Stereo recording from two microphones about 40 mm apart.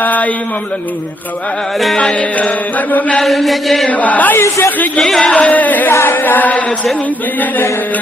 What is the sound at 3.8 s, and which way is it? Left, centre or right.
Chant, left.